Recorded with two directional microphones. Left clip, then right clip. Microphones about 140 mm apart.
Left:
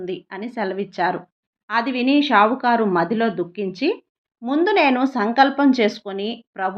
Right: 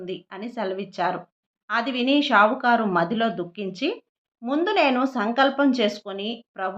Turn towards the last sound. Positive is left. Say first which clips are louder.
# left 4 dB
turn(degrees=30)  # may be behind; listen again after turning